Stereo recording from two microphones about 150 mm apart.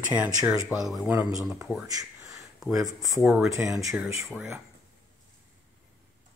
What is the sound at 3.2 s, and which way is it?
Speech, centre (ahead or behind).